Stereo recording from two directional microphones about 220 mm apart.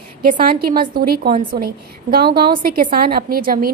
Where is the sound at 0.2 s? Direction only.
40° right (ahead or behind).